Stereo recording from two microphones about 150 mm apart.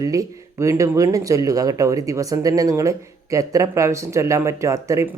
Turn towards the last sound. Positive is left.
turn(degrees=-20)  # may be behind; listen again after turning